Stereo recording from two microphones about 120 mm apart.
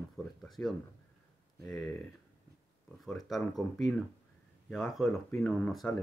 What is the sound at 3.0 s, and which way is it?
Speech, centre (ahead or behind).